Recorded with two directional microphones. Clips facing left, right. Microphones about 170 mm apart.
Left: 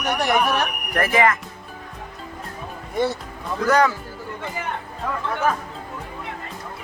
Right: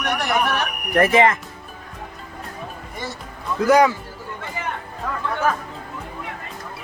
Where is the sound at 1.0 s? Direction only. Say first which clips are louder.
Right 3 dB; 25° right (ahead or behind).